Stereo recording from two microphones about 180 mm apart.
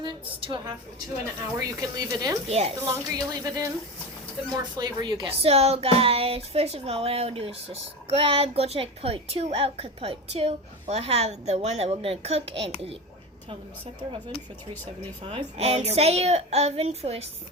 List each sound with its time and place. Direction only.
0.0 s speech: 30° right (ahead or behind)
2.5 s speech: 35° right (ahead or behind)
2.7 s speech: 20° right (ahead or behind); by 13.0 s 35° right (ahead or behind)
15.3 s speech: 35° right (ahead or behind)